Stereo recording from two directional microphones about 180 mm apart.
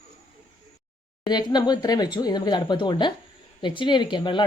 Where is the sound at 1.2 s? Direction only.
25° left (ahead or behind).